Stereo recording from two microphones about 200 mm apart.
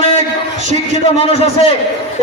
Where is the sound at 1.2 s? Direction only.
30° left (ahead or behind).